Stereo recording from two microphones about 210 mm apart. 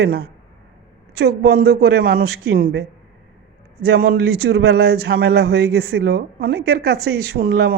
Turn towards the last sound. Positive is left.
turn(degrees=-50)  # may be behind; listen again after turning